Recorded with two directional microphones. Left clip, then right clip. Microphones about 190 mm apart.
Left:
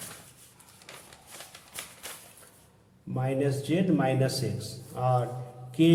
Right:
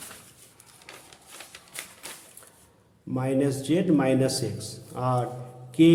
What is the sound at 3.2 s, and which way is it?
Speech, 20° right (ahead or behind).